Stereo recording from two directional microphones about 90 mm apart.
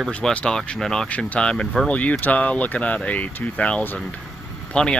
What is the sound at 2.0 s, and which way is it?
Speech, 20° left (ahead or behind).